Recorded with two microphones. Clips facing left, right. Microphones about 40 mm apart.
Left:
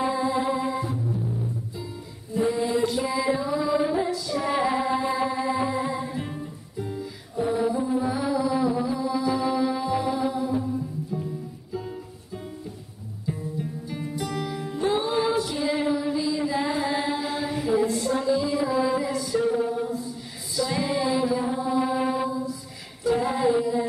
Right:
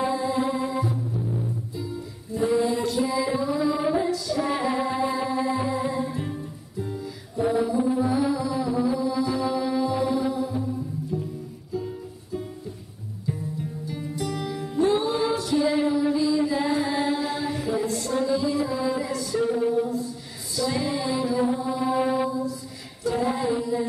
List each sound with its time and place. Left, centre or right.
0.0 s music: centre
2.6 s music: centre
4.3 s female singing: centre
4.6 s music: centre
13.9 s music: centre
14.2 s music: centre
20.5 s mantra: centre
23.0 s female singing: centre